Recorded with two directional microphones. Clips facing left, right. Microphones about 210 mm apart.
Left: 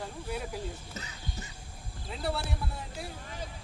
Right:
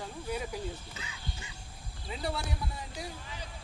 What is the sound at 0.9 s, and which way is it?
Speech, 40° left (ahead or behind).